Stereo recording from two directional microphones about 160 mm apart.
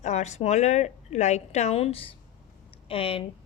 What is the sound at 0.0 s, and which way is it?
A woman's voice, 45° left (ahead or behind).